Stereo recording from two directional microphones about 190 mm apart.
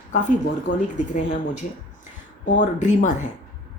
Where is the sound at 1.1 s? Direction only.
40° left (ahead or behind).